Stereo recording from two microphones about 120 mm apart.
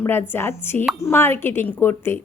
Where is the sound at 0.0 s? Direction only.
20° left (ahead or behind).